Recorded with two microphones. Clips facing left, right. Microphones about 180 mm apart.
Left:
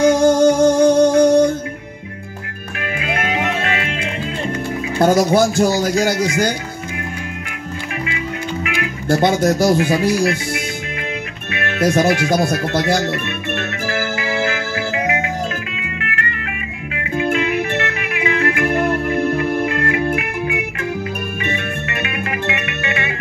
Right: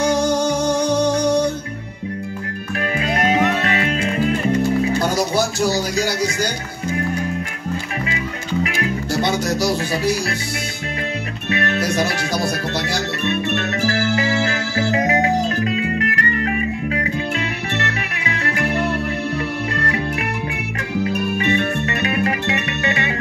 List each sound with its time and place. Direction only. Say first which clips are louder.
0.0 s music: left 6 dB; 55° left (ahead or behind)
3.0 s music: right 4 dB; 35° right (ahead or behind)
4.9 s speech: left 5 dB; 55° left (ahead or behind)
8.6 s music: even; 35° right (ahead or behind)
9.1 s speech: left 7 dB; 55° left (ahead or behind)
11.8 s speech: left 6 dB; 55° left (ahead or behind)
14.9 s music: right 5 dB; 40° right (ahead or behind)
18.1 s music: left 6 dB; 35° right (ahead or behind)
18.7 s music: left 3 dB; 50° left (ahead or behind)
21.5 s music: right 4 dB; 35° right (ahead or behind)